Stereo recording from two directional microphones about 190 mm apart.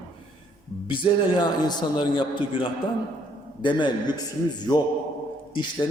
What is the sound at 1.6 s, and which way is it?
A man's voice, 20° left (ahead or behind).